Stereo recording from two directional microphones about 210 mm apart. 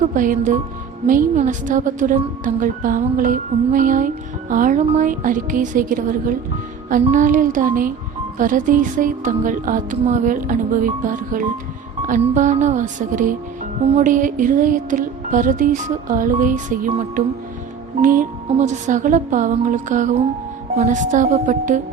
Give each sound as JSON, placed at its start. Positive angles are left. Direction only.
{"t": 0.0, "sound": "a woman's voice", "side_deg": -40}